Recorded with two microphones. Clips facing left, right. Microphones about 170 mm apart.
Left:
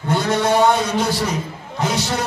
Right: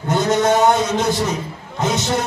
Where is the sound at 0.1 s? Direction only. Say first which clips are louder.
Right 2 dB; 20° right (ahead or behind).